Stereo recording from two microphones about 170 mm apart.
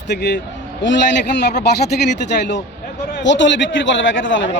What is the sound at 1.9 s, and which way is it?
Speech, 65° left (ahead or behind).